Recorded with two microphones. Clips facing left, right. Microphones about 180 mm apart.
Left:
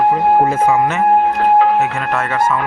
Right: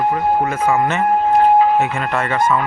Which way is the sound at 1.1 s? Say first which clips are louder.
Right 1 dB; 65° left (ahead or behind).